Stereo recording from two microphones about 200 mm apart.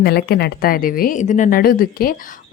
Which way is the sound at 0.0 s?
50° left (ahead or behind).